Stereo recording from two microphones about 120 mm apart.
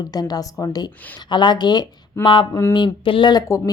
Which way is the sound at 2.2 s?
20° left (ahead or behind).